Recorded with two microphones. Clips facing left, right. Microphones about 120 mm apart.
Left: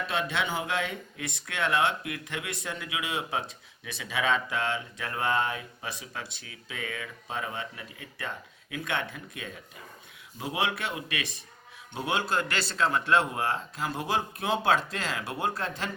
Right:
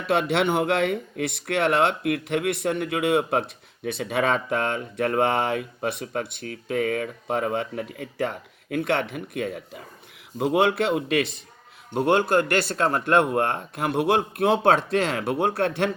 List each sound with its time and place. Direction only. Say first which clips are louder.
0.1 s speech: right 11 dB; 65° right (ahead or behind)